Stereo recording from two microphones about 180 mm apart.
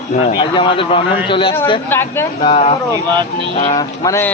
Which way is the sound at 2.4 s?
30° left (ahead or behind).